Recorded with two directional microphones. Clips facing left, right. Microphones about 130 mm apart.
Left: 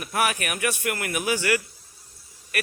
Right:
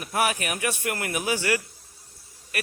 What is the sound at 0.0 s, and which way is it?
A man's voice, 25° right (ahead or behind).